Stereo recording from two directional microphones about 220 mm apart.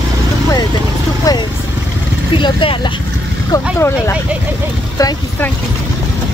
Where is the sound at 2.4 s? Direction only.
25° left (ahead or behind).